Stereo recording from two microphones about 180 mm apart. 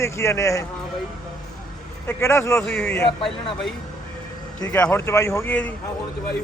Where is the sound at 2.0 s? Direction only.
15° left (ahead or behind).